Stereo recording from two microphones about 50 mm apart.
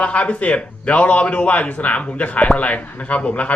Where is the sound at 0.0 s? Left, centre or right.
Left.